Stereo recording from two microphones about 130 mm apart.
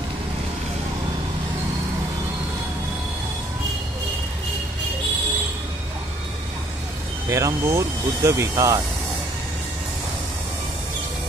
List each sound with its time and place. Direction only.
7.2 s speech: 25° right (ahead or behind)